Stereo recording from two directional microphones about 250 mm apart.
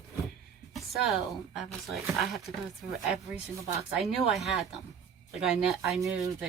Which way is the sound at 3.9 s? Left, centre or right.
Centre.